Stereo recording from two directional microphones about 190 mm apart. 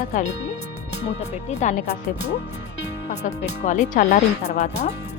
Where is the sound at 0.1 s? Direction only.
35° left (ahead or behind).